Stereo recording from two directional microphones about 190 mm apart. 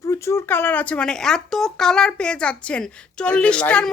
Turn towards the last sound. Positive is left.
turn(degrees=5)  # may be behind; listen again after turning